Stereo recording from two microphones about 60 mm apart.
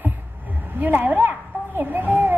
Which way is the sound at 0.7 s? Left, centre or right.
Right.